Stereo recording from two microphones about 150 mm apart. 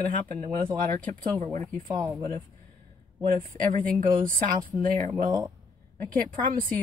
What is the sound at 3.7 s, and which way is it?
Speech, 70° right (ahead or behind).